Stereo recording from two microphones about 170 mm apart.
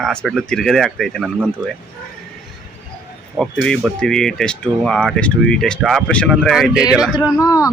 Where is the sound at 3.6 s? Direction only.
5° left (ahead or behind).